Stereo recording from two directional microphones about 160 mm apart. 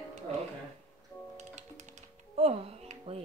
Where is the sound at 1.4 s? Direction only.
50° right (ahead or behind).